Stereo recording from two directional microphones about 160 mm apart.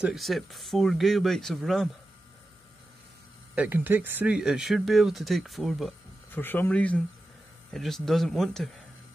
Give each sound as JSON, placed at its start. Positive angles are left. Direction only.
{"t": 0.0, "sound": "speech", "side_deg": 0}
{"t": 3.5, "sound": "speech", "side_deg": -10}
{"t": 6.3, "sound": "speech", "side_deg": 10}